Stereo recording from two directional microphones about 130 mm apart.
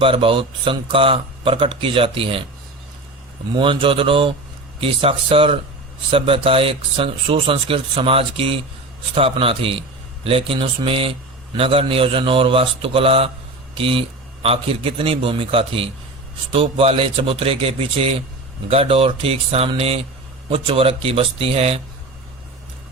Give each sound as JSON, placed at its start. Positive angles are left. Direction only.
{"t": 0.0, "sound": "speech", "side_deg": -45}
{"t": 3.5, "sound": "speech", "side_deg": -40}